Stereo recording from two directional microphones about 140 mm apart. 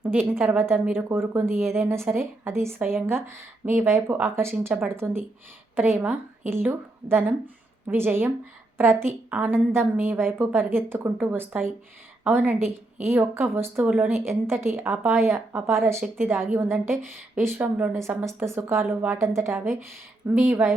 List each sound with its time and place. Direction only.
0.0 s a woman's voice: 15° right (ahead or behind)